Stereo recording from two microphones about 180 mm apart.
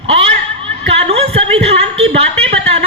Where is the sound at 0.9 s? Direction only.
35° right (ahead or behind).